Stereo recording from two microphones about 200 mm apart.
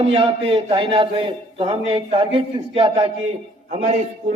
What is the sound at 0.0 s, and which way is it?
A man's voice, 30° right (ahead or behind).